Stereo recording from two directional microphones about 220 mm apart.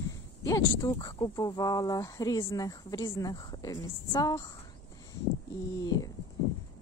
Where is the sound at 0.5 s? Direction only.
15° left (ahead or behind).